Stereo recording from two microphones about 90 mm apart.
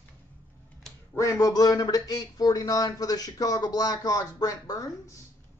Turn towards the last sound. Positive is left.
turn(degrees=45)  # may be behind; listen again after turning